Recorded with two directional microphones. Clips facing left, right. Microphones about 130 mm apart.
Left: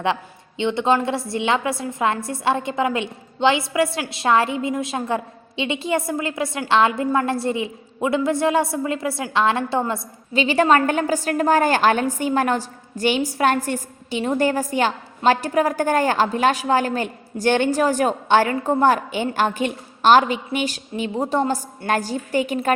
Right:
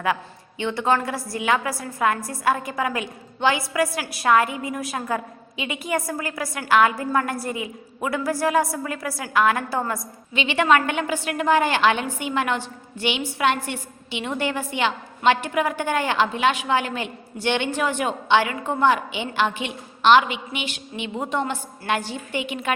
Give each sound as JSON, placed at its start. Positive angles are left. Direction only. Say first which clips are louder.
{"t": 0.6, "sound": "a woman's voice", "louder": "left 3 dB", "side_deg": 20}
{"t": 10.3, "sound": "a woman's voice", "louder": "left 3 dB", "side_deg": 35}